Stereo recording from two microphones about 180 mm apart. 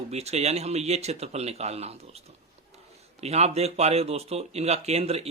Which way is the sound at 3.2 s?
35° right (ahead or behind).